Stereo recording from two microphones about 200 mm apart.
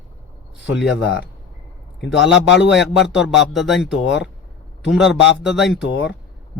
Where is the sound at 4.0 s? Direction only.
60° left (ahead or behind).